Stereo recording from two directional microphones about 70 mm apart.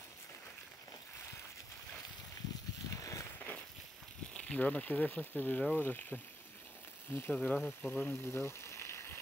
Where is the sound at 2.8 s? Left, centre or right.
Left.